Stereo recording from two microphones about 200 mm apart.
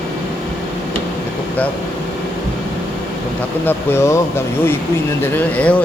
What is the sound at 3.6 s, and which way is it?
Speech, 10° left (ahead or behind).